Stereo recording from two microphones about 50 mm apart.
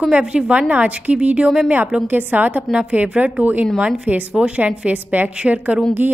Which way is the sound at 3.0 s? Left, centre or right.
Right.